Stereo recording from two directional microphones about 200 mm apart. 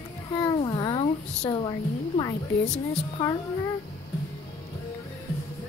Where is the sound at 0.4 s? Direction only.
20° left (ahead or behind).